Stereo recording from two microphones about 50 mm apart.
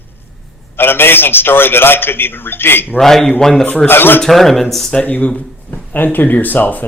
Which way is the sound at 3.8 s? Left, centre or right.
Left.